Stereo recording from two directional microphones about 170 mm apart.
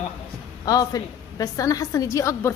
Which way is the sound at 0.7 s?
20° left (ahead or behind).